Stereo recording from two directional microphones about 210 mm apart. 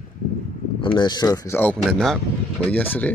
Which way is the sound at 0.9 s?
20° left (ahead or behind).